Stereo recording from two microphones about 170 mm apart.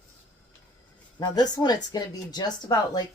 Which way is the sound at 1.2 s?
25° left (ahead or behind).